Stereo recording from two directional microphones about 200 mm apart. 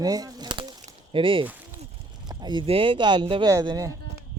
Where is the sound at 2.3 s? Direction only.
20° right (ahead or behind).